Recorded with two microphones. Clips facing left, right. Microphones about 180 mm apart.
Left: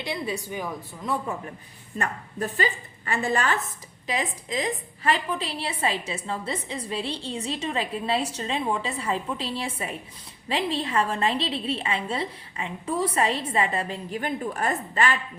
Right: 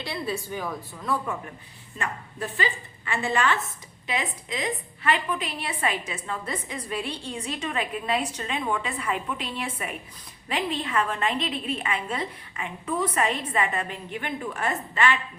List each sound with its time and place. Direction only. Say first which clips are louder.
0.0 s a woman's voice: left 1 dB; 20° left (ahead or behind)
2.0 s a woman's voice: left 3 dB; 40° left (ahead or behind)